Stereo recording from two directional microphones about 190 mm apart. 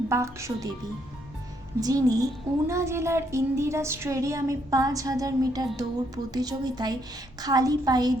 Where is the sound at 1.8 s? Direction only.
20° right (ahead or behind).